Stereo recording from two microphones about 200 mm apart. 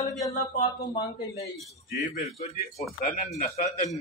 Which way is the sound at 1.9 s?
35° left (ahead or behind).